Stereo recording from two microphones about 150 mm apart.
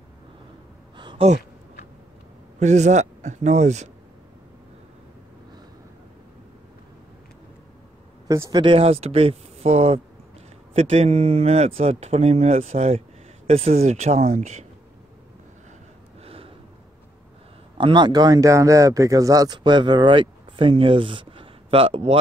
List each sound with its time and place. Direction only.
0.9 s a sound: 30° right (ahead or behind)
2.6 s speech: 50° right (ahead or behind)
8.3 s speech: 25° right (ahead or behind); by 14.7 s 50° right (ahead or behind)
16.2 s gasp: 40° right (ahead or behind)
17.7 s speech: 30° right (ahead or behind)